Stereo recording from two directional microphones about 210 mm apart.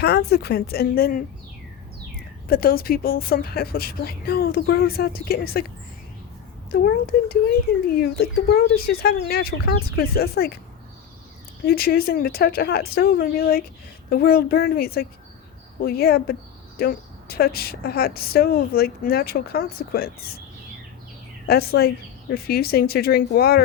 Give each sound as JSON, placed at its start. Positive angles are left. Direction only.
{"t": 0.0, "sound": "speech", "side_deg": 50}
{"t": 2.5, "sound": "speech", "side_deg": 45}
{"t": 6.7, "sound": "speech", "side_deg": 45}
{"t": 11.6, "sound": "speech", "side_deg": 45}
{"t": 21.4, "sound": "speech", "side_deg": 50}